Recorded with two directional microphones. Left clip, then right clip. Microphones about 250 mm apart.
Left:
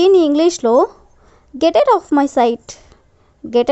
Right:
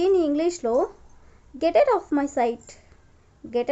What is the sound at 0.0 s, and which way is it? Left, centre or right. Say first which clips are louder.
A woman's voice: left 10 dB; left.